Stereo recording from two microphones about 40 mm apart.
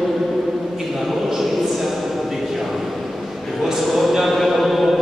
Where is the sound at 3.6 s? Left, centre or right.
Centre.